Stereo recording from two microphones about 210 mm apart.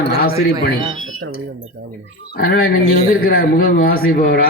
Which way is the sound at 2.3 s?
50° left (ahead or behind).